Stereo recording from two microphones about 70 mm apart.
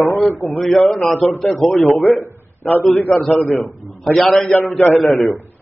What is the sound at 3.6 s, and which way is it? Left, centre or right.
Speech, centre.